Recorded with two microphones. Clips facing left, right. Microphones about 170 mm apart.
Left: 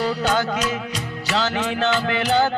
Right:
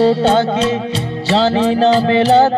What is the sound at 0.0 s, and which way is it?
Music, 30° right (ahead or behind).